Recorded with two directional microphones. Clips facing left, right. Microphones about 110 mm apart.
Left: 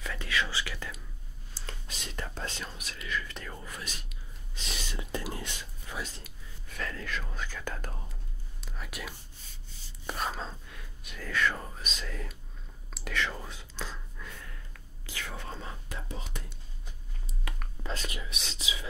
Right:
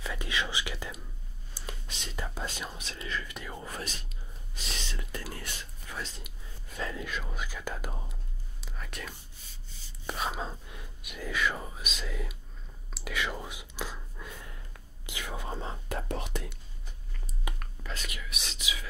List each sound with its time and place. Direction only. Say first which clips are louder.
0.0 s whispering: left 1 dB; 15° right (ahead or behind)
2.8 s whispering: left 3 dB; 30° right (ahead or behind)
3.3 s whispering: right 1 dB; 10° right (ahead or behind)
3.6 s whispering: right 4 dB; 40° right (ahead or behind)
4.9 s whispering: left 4 dB; 20° left (ahead or behind)
6.8 s whispering: right 1 dB; 15° right (ahead or behind)
15.9 s whispering: right 10 dB; 65° right (ahead or behind)
17.5 s whispering: right 2 dB; 15° right (ahead or behind)
17.8 s whispering: left 3 dB; 30° left (ahead or behind)